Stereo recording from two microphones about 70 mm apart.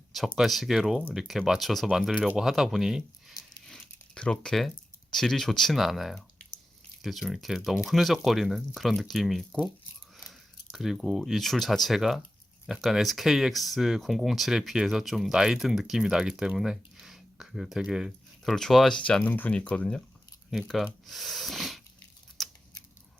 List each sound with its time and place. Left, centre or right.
0.1 s speech: centre
4.1 s speech: centre
19.2 s speech: left
20.5 s speech: centre
22.4 s a sound: centre